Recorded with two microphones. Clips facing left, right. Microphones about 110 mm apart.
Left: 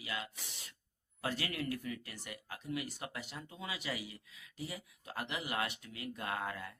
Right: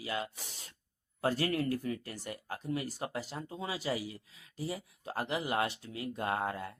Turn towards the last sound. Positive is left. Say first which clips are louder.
# right 6 dB
turn(degrees=-30)  # may be behind; listen again after turning